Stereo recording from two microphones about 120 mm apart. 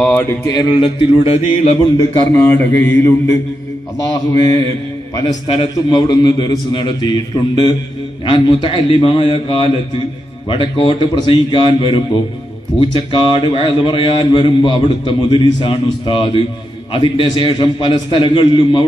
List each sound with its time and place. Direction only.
0.1 s speech: 20° left (ahead or behind)
0.6 s a man's voice: 40° left (ahead or behind); by 1.8 s 55° left (ahead or behind)
2.3 s speech: 20° left (ahead or behind)
4.3 s a man's voice: 30° left (ahead or behind)
5.5 s a man's voice: 45° left (ahead or behind)